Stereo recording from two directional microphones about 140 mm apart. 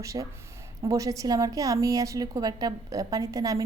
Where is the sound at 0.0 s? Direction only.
25° right (ahead or behind).